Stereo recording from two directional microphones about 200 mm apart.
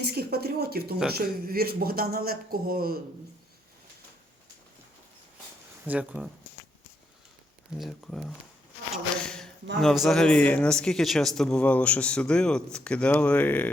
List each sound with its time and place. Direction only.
0.0 s speech: 55° right (ahead or behind)
5.8 s speech: 5° right (ahead or behind)
7.8 s speech: centre (ahead or behind)
8.9 s a sound: 5° left (ahead or behind)
9.8 s speech: centre (ahead or behind)